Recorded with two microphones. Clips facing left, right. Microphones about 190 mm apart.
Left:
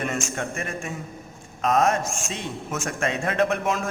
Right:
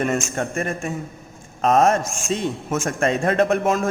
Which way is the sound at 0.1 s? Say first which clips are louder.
Right 5 dB; 45° right (ahead or behind).